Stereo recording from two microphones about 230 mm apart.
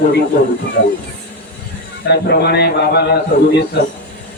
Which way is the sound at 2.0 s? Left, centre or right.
Left.